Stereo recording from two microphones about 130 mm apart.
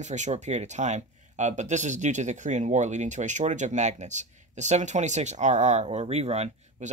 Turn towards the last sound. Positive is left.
turn(degrees=-55)  # may be behind; listen again after turning